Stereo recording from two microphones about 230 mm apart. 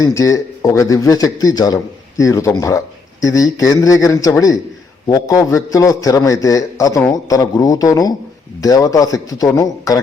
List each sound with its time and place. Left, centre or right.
0.0 s a man's voice: centre